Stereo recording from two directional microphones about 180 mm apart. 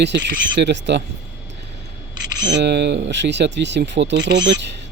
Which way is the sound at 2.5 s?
70° right (ahead or behind).